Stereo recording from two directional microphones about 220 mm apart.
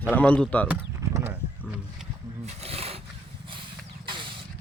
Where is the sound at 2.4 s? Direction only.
30° right (ahead or behind).